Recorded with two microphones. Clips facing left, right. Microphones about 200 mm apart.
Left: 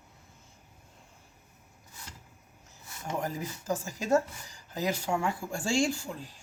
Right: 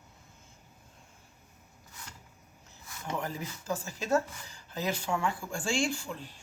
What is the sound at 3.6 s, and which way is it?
Speech, 15° left (ahead or behind).